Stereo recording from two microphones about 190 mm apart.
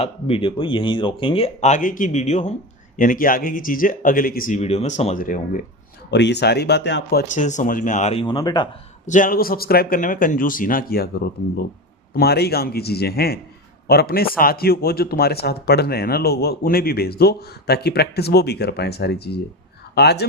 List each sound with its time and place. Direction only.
0.0 s speech: 30° left (ahead or behind)
6.1 s speech: 65° left (ahead or behind)
7.4 s speech: 40° left (ahead or behind); by 8.7 s 20° left (ahead or behind)
9.0 s speech: 45° left (ahead or behind)
12.1 s speech: 55° left (ahead or behind)